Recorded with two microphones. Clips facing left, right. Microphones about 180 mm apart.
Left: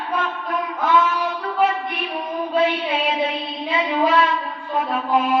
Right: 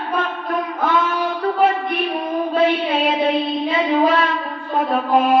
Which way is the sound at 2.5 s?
50° right (ahead or behind).